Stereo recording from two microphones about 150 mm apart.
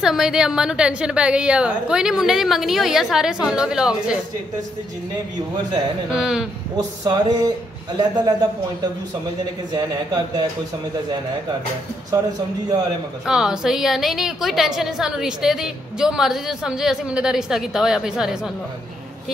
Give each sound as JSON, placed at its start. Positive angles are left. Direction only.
{"t": 0.0, "sound": "a woman's voice", "side_deg": -5}
{"t": 6.0, "sound": "a woman's voice", "side_deg": -5}
{"t": 7.1, "sound": "speech", "side_deg": -25}
{"t": 9.7, "sound": "speech", "side_deg": -25}
{"t": 13.3, "sound": "a woman's voice", "side_deg": -5}